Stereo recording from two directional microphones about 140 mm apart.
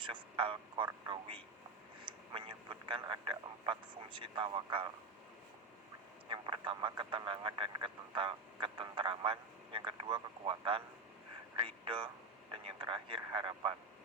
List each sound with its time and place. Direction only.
0.0 s a man's voice: 35° right (ahead or behind)
6.2 s a man's voice: 35° right (ahead or behind)